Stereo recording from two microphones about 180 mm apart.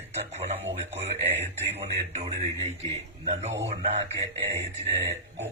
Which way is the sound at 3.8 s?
35° right (ahead or behind).